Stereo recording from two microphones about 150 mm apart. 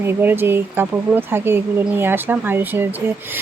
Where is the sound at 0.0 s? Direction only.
15° right (ahead or behind).